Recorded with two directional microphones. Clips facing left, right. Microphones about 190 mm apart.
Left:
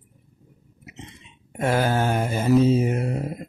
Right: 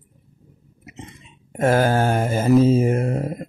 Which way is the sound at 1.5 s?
45° right (ahead or behind).